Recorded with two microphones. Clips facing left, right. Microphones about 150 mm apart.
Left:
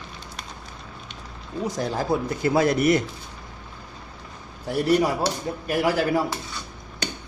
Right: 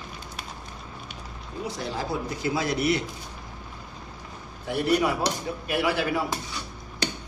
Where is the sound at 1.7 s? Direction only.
50° left (ahead or behind).